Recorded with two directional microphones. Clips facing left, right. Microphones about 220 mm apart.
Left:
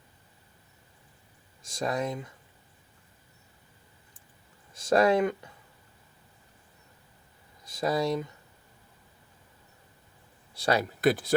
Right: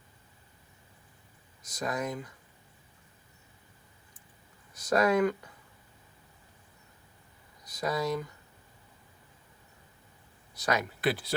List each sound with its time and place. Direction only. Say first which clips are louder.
1.6 s speech: left 3 dB; 30° left (ahead or behind)
4.7 s speech: left 3 dB; 25° left (ahead or behind)
7.6 s speech: left 4 dB; 25° left (ahead or behind)
10.5 s speech: left 4 dB; 30° left (ahead or behind)
11.0 s speech: left 8 dB; 45° left (ahead or behind)